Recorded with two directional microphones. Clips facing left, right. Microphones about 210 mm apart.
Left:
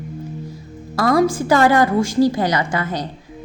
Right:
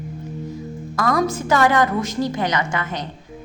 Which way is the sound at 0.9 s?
35° left (ahead or behind).